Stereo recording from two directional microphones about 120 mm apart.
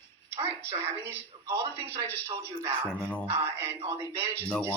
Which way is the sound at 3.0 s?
10° left (ahead or behind).